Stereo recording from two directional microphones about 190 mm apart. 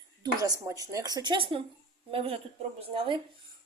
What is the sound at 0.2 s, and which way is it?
Speech, 20° right (ahead or behind).